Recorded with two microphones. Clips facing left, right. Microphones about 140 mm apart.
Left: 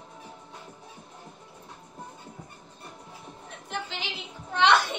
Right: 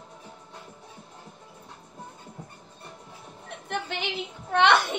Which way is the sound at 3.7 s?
55° right (ahead or behind).